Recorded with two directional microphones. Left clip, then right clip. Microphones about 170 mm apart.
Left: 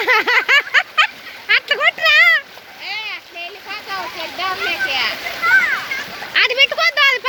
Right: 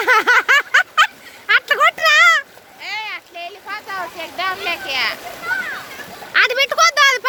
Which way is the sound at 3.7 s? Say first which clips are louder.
Left 1 dB; 40° right (ahead or behind).